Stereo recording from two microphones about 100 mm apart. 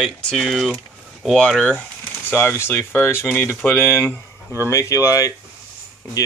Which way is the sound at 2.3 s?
25° left (ahead or behind).